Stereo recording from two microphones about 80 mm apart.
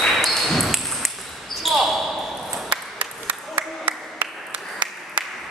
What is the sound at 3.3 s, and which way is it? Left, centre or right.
Applause, centre.